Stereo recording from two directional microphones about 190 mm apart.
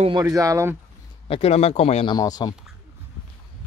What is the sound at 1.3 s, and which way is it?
Speech, 35° left (ahead or behind).